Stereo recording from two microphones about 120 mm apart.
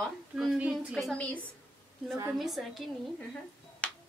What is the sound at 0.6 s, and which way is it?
Speech, 10° right (ahead or behind).